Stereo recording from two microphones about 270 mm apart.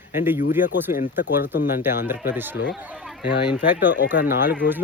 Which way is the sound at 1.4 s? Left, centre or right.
Left.